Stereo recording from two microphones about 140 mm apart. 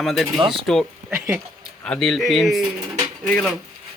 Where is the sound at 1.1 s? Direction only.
20° right (ahead or behind).